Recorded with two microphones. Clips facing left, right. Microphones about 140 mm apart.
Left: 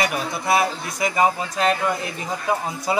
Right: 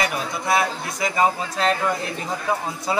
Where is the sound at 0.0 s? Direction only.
20° left (ahead or behind).